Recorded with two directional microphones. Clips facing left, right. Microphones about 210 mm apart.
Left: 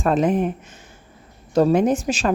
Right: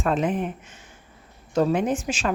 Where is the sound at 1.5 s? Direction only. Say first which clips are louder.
Left 5 dB; 40° left (ahead or behind).